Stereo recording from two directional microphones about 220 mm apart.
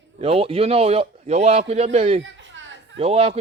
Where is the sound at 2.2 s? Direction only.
55° right (ahead or behind).